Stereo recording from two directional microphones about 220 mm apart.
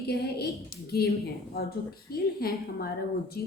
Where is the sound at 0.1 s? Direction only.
45° left (ahead or behind).